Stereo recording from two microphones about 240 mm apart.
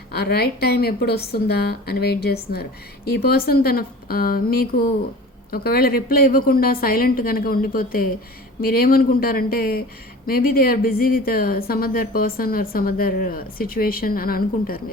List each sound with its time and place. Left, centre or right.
0.1 s a woman's voice: left